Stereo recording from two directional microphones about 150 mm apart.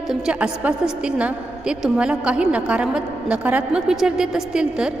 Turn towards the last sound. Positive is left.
turn(degrees=-5)  # may be behind; listen again after turning